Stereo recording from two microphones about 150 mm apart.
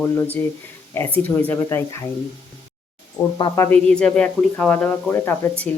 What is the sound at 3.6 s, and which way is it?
Speech, 10° left (ahead or behind).